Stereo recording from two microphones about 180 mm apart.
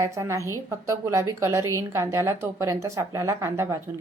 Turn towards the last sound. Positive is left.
turn(degrees=-15)  # may be behind; listen again after turning